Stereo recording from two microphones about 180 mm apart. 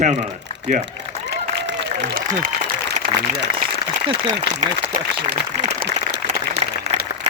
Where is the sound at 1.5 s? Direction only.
70° right (ahead or behind).